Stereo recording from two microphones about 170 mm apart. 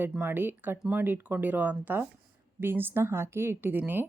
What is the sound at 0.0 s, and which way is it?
Speech, 10° right (ahead or behind).